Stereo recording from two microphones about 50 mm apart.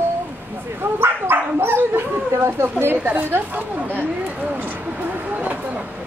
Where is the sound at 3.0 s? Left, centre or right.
Right.